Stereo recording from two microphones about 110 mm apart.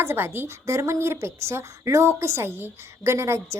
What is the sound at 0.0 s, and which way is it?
A woman's voice, 25° right (ahead or behind).